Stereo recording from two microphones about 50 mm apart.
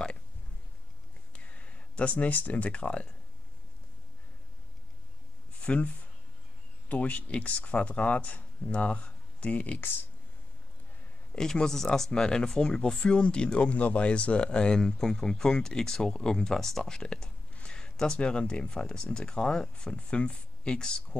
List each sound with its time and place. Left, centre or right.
1.3 s speech: left
5.6 s speech: left
6.9 s speech: left
11.3 s speech: centre